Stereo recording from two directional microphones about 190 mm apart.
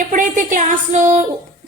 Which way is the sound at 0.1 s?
45° right (ahead or behind).